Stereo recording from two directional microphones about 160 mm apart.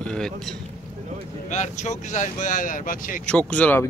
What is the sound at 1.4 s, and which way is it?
Vehicle, 50° left (ahead or behind).